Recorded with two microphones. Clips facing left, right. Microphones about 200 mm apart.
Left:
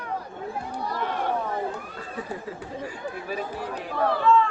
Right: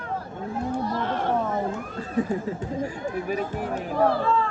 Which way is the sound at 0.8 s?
10° left (ahead or behind).